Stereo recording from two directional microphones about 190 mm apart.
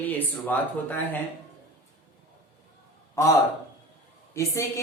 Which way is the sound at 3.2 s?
15° left (ahead or behind).